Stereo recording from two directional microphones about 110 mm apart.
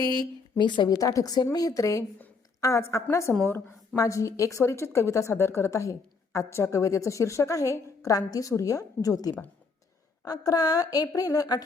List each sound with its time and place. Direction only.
0.0 s speech: 40° left (ahead or behind)
0.9 s a woman's voice: 30° left (ahead or behind)